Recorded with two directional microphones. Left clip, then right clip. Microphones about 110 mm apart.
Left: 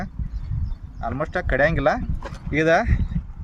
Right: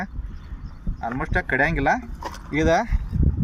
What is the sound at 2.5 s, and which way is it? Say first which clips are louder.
Speech: left 2 dB; 85° left.